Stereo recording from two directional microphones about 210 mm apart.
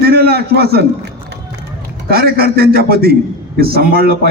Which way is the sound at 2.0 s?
45° right (ahead or behind).